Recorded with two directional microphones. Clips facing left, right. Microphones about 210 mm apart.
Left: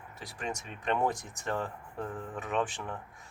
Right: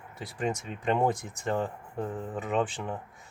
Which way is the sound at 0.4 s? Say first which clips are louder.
Right 5 dB; 25° right (ahead or behind).